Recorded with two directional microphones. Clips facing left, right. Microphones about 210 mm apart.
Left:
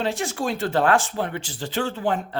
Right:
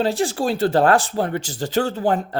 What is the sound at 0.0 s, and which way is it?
Speech, 35° right (ahead or behind).